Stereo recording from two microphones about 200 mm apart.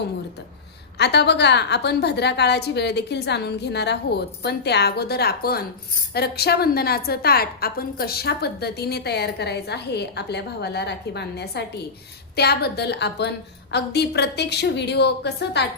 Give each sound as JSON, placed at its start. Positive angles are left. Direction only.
{"t": 0.9, "sound": "a woman's voice", "side_deg": 55}